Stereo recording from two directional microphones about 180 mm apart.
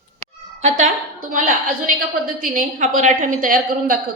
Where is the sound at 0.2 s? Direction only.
40° right (ahead or behind).